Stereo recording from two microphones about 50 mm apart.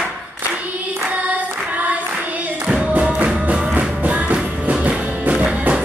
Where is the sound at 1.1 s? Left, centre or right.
Right.